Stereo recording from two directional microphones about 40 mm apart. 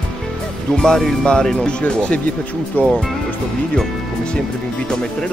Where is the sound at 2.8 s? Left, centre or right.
Left.